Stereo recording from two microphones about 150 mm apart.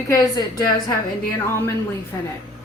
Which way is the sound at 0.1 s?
25° left (ahead or behind).